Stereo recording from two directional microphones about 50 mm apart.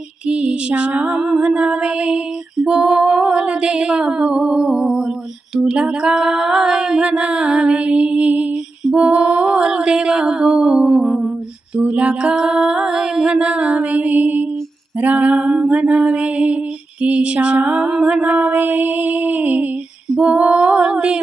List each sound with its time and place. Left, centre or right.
0.3 s music: right
5.5 s female singing: centre
9.0 s a sound: right
11.8 s female singing: right
20.1 s female singing: centre